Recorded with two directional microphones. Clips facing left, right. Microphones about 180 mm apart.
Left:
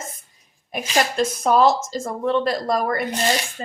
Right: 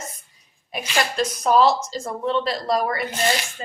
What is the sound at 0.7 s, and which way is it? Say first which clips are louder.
Speech: left 3 dB; 45° left (ahead or behind).